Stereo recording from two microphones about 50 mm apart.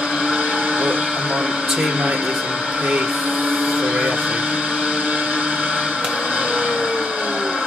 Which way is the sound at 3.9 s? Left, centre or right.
Right.